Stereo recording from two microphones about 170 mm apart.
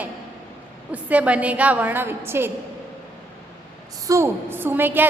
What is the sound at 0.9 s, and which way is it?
A woman's voice, 10° right (ahead or behind).